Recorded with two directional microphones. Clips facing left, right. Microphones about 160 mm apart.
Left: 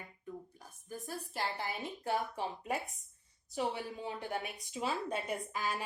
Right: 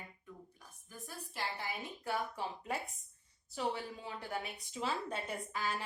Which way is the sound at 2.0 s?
20° left (ahead or behind).